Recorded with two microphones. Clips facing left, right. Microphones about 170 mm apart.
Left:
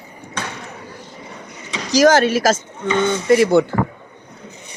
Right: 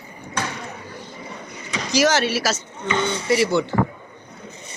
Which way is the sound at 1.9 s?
45° left (ahead or behind).